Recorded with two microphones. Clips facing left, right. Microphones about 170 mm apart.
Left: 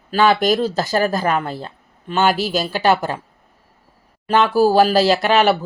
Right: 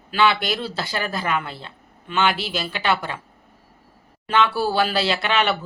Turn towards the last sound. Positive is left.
turn(degrees=40)  # may be behind; listen again after turning